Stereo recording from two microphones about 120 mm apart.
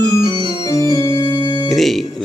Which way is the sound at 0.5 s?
30° left (ahead or behind).